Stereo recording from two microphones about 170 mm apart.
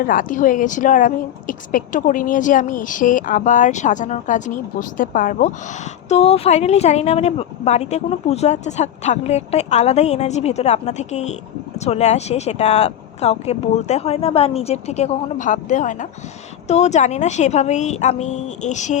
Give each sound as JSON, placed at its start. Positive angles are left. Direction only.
{"t": 0.0, "sound": "a woman's voice", "side_deg": 55}